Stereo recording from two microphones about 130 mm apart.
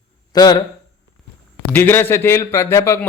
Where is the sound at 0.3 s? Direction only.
30° left (ahead or behind).